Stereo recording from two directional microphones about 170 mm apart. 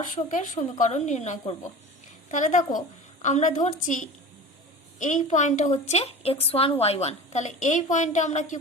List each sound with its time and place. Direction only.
0.3 s a woman's voice: 50° left (ahead or behind)